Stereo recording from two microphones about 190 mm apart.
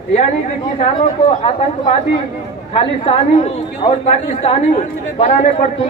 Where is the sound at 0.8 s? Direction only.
30° left (ahead or behind).